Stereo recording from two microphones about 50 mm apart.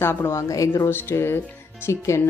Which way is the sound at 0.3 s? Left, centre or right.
Left.